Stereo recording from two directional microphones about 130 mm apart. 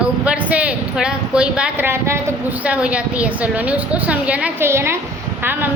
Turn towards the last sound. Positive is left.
turn(degrees=-15)  # may be behind; listen again after turning